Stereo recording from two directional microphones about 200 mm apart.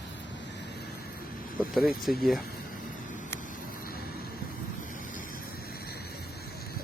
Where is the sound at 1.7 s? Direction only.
Centre (ahead or behind).